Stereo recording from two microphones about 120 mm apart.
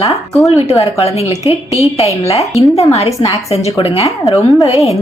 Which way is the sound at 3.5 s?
55° left (ahead or behind).